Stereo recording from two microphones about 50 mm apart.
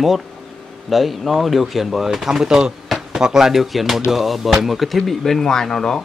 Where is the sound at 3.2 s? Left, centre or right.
Centre.